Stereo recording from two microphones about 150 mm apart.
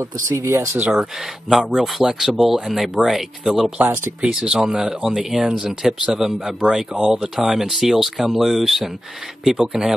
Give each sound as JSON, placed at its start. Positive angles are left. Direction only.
{"t": 0.0, "sound": "speech", "side_deg": -20}
{"t": 3.8, "sound": "speech", "side_deg": -15}